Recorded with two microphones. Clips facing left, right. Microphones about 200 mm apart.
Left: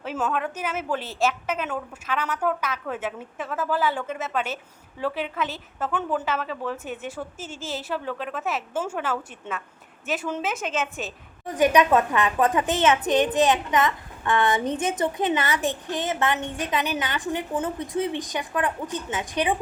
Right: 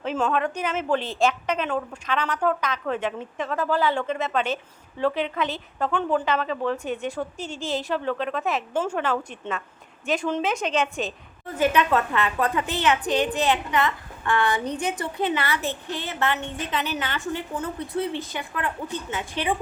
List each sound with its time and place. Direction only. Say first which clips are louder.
0.0 s a woman's voice: right 3 dB; 5° left (ahead or behind)
11.4 s a woman's voice: left 3 dB; 15° left (ahead or behind)